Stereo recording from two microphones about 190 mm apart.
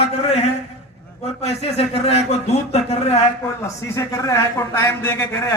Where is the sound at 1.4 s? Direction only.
35° left (ahead or behind).